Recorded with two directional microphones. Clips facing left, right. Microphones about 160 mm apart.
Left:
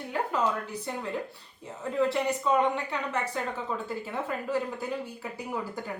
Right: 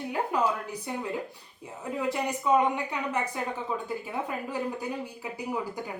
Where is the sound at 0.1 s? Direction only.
15° right (ahead or behind).